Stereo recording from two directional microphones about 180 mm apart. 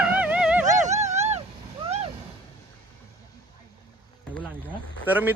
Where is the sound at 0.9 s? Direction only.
40° right (ahead or behind).